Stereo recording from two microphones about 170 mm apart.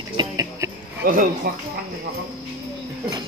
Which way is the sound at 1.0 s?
55° right (ahead or behind).